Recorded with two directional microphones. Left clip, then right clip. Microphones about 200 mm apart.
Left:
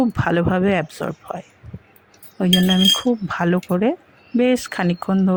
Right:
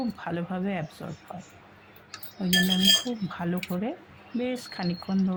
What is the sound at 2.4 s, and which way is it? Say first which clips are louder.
Speech: left 7 dB; 50° left (ahead or behind).